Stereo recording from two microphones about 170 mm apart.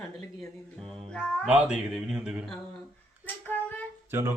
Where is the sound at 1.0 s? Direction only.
5° left (ahead or behind).